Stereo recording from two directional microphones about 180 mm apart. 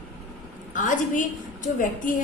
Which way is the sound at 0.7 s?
45° left (ahead or behind).